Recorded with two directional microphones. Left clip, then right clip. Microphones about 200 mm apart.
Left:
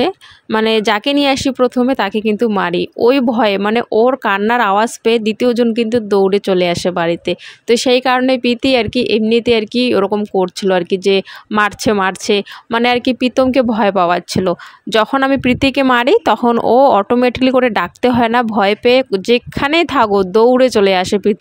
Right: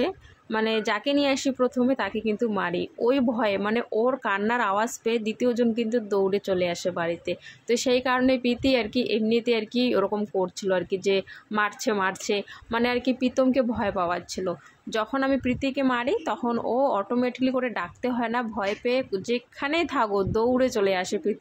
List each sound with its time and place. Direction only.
0.0 s speech: 50° left (ahead or behind)